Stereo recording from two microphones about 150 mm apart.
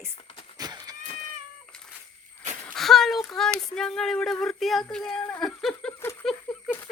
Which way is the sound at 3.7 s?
5° left (ahead or behind).